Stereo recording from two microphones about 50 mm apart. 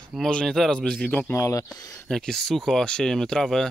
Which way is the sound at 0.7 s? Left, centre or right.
Left.